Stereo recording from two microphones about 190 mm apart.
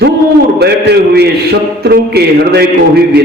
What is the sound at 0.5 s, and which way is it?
A man's voice, 60° right (ahead or behind).